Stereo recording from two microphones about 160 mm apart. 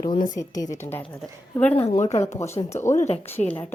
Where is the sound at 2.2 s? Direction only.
15° left (ahead or behind).